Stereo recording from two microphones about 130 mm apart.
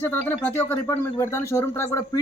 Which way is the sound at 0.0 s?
15° left (ahead or behind).